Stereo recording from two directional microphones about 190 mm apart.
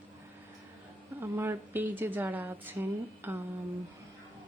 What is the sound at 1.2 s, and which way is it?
A woman's voice, 15° right (ahead or behind).